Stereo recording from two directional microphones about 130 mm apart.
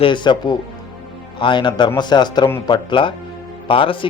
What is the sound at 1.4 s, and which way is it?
A man's voice, 35° left (ahead or behind).